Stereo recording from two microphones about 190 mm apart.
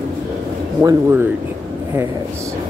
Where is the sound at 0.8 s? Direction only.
10° right (ahead or behind).